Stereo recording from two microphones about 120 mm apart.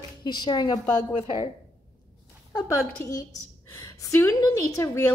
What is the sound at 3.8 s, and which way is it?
A woman's voice, 25° left (ahead or behind).